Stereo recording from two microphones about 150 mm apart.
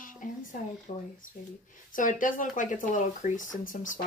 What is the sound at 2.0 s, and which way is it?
Speech, 60° left (ahead or behind).